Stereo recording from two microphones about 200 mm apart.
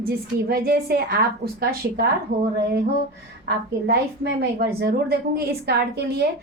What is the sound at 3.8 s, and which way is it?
A woman's voice, 55° right (ahead or behind).